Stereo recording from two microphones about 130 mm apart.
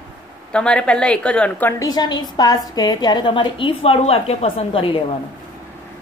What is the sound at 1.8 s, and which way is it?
A woman's voice, 30° left (ahead or behind).